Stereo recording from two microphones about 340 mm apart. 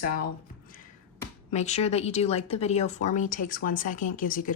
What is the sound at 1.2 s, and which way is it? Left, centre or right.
Speech, centre.